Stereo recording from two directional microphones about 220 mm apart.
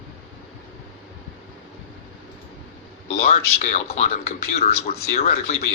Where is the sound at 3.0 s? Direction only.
30° left (ahead or behind).